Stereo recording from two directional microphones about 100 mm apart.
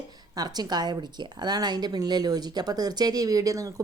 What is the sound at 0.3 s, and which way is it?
A woman's voice, 40° right (ahead or behind).